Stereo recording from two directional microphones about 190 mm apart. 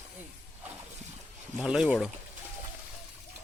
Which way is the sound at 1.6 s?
Centre (ahead or behind).